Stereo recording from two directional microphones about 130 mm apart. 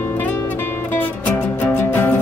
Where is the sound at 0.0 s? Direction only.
15° left (ahead or behind).